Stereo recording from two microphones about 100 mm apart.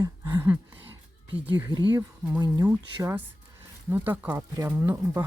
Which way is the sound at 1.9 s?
40° right (ahead or behind).